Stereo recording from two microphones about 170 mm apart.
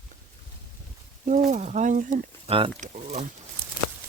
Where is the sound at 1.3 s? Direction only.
45° right (ahead or behind).